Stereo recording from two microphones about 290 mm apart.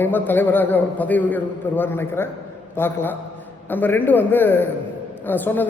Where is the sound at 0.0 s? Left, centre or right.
Centre.